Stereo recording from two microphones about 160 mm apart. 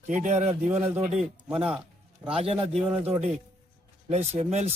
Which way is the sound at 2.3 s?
35° right (ahead or behind).